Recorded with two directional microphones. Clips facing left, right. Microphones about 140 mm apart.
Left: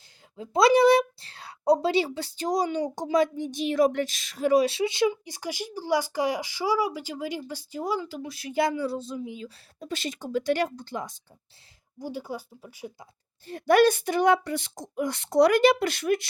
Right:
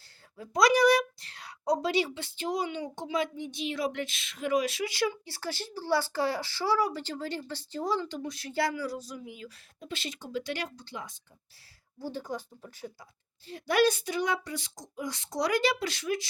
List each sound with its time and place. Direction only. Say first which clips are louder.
0.3 s speech: left 4 dB; 25° left (ahead or behind)
9.8 s speech: left 6 dB; 45° left (ahead or behind)
11.9 s speech: left 2 dB; 10° left (ahead or behind)
13.5 s speech: left 6 dB; 55° left (ahead or behind)